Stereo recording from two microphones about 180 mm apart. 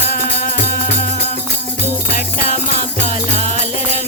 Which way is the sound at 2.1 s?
45° left (ahead or behind).